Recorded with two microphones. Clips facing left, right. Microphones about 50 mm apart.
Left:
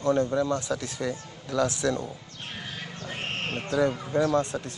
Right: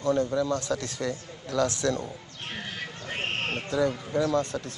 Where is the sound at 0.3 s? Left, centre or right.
Left.